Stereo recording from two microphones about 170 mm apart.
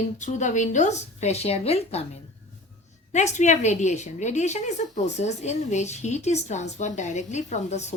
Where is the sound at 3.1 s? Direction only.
45° left (ahead or behind).